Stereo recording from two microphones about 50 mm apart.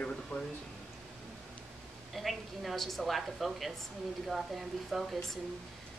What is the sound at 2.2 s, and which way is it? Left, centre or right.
A woman's voice, centre.